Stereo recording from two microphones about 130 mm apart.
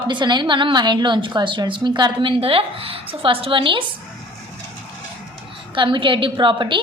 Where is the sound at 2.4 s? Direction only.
45° right (ahead or behind).